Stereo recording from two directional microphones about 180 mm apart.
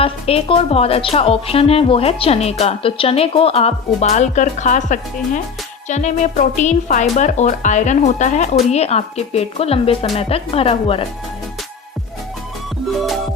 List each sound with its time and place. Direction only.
0.0 s speech: 30° left (ahead or behind)